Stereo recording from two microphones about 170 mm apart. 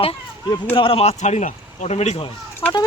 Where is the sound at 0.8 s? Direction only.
35° left (ahead or behind).